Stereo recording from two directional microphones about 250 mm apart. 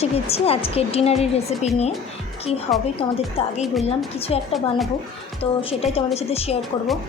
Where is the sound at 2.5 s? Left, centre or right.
Centre.